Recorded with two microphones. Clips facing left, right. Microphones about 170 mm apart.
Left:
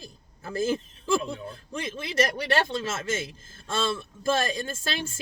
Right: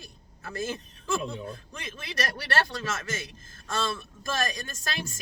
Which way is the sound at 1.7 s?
25° left (ahead or behind).